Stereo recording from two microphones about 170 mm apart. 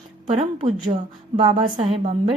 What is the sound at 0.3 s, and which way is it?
A woman's voice, 35° right (ahead or behind).